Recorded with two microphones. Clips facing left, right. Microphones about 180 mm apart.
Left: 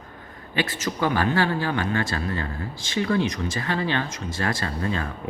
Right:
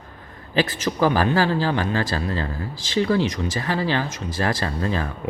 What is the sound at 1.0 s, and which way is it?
Speech, 30° right (ahead or behind).